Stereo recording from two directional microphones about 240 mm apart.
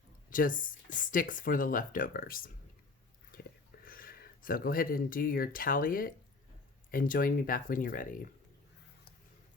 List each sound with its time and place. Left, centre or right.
0.3 s speech: left
3.8 s speech: left